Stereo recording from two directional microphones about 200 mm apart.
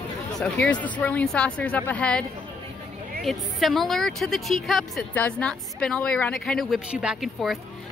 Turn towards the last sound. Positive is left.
turn(degrees=0)  # may be behind; listen again after turning